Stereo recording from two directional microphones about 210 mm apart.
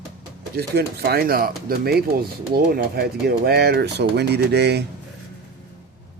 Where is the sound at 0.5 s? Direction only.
50° right (ahead or behind).